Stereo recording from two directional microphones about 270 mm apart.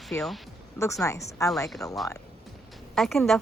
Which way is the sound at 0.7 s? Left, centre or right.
Centre.